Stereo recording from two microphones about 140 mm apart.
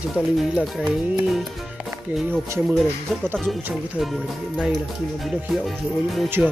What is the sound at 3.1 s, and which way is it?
Speech, centre (ahead or behind).